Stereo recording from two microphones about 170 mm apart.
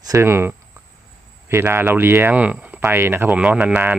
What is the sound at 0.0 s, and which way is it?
Speech, 15° right (ahead or behind).